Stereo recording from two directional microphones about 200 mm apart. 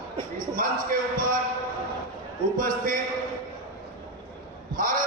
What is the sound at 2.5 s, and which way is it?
Music, 45° right (ahead or behind).